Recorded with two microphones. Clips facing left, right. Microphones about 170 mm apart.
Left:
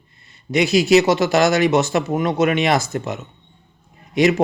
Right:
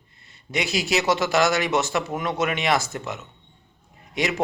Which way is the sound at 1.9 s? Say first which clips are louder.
Left 6 dB; 40° left (ahead or behind).